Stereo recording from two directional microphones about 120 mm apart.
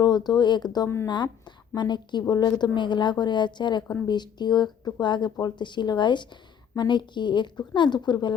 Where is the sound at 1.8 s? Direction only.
40° left (ahead or behind).